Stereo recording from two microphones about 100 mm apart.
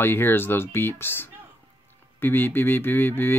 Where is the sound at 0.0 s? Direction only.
25° left (ahead or behind).